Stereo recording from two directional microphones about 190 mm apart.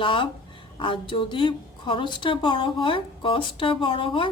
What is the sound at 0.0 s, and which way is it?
Speech, 25° left (ahead or behind).